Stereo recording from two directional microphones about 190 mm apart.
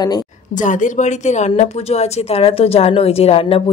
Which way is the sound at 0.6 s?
40° left (ahead or behind).